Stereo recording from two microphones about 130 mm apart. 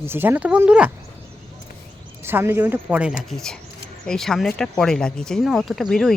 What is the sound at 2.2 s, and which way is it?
Speech, 20° right (ahead or behind).